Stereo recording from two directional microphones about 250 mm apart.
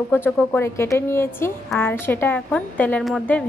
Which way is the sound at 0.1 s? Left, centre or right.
Centre.